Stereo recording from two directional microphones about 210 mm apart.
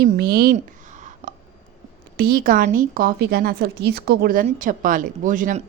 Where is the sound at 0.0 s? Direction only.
50° right (ahead or behind).